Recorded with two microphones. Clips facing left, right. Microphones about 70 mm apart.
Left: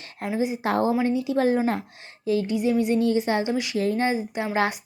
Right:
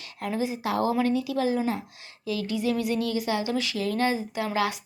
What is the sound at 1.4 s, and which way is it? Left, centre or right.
Speech, left.